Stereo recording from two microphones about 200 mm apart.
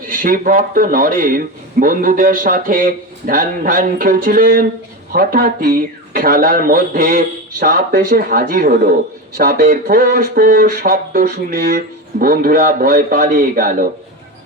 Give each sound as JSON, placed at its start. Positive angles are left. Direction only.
{"t": 0.1, "sound": "speech", "side_deg": -45}